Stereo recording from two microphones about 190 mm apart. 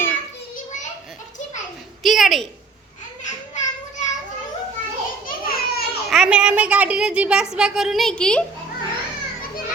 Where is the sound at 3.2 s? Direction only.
40° left (ahead or behind).